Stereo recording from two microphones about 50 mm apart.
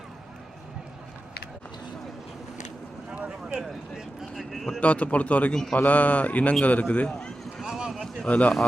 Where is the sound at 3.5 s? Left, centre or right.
Centre.